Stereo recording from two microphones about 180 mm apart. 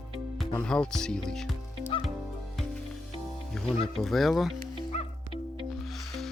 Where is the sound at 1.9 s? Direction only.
30° left (ahead or behind).